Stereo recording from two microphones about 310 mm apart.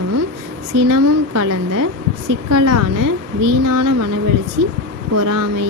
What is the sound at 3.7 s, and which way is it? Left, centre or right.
Speech, right.